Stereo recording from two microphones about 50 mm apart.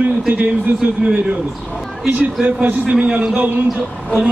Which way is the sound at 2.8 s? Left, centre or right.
Right.